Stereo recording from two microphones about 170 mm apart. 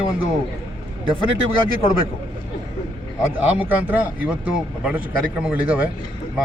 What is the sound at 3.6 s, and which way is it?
Speech, 10° right (ahead or behind).